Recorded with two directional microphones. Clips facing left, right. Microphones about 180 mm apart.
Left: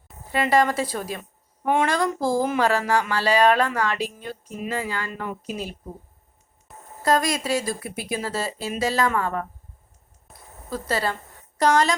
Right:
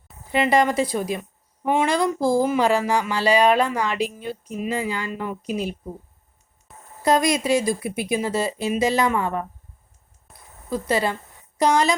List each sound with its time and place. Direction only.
0.3 s speech: 15° right (ahead or behind)
7.0 s speech: 15° right (ahead or behind)
10.7 s a woman's voice: 15° right (ahead or behind)